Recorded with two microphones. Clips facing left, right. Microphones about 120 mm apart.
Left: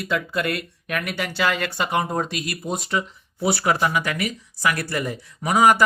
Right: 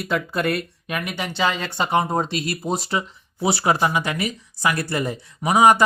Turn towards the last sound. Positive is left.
turn(degrees=-20)  # may be behind; listen again after turning